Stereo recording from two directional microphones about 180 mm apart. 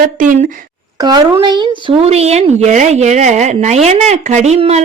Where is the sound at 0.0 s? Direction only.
50° right (ahead or behind).